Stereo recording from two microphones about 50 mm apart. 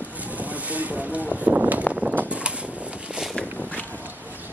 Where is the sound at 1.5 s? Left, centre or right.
Right.